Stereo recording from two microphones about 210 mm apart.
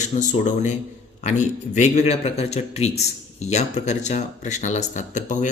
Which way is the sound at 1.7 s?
35° left (ahead or behind).